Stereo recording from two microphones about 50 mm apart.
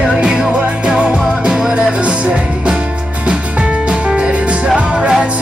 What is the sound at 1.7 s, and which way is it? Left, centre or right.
Music, right.